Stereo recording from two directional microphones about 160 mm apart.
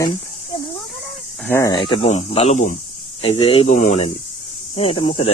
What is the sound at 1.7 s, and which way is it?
Speech, 30° left (ahead or behind).